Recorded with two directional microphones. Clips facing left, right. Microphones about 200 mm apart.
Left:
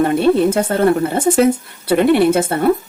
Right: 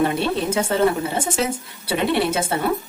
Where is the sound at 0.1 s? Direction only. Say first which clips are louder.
Left 9 dB; 55° left (ahead or behind).